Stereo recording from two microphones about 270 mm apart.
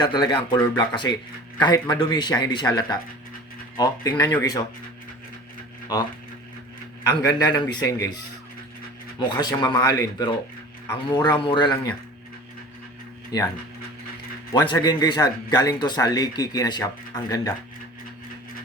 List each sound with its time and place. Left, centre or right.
0.0 s speech: centre
7.5 s speech: centre
13.3 s speech: centre
14.5 s speech: centre